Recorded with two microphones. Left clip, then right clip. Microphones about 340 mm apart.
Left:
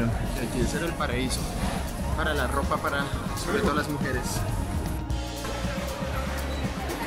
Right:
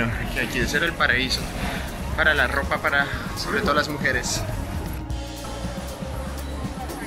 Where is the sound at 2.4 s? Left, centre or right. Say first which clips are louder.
Right 5 dB; centre.